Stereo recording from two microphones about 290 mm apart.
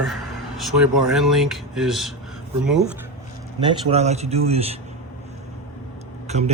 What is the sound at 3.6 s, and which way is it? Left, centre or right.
Speech, centre.